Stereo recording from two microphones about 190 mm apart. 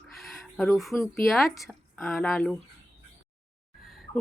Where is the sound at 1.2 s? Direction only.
Centre (ahead or behind).